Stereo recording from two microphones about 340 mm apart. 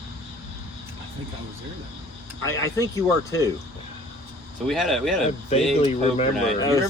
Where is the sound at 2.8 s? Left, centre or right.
Centre.